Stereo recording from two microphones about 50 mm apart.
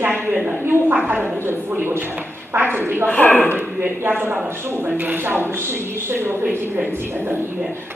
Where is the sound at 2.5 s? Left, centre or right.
Right.